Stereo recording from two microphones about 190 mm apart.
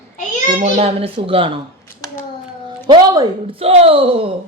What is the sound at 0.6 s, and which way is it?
Speech, 30° right (ahead or behind).